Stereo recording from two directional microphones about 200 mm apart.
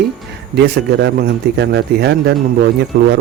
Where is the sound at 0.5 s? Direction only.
55° right (ahead or behind).